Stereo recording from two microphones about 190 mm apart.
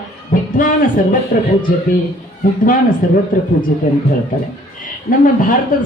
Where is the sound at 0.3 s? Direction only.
45° left (ahead or behind).